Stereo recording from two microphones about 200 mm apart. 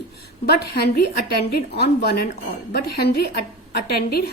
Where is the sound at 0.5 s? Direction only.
50° left (ahead or behind).